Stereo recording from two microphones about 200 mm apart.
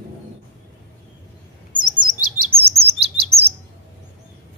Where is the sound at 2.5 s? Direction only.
30° right (ahead or behind).